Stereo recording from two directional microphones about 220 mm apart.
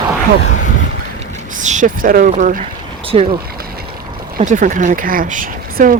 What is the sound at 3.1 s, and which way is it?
Speech, 25° right (ahead or behind).